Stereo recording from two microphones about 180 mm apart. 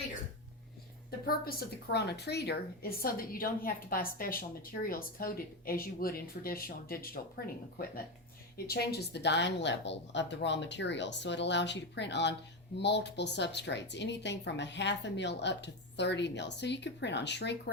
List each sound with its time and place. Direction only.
1.3 s a woman's voice: 55° left (ahead or behind); by 17.6 s 70° left (ahead or behind)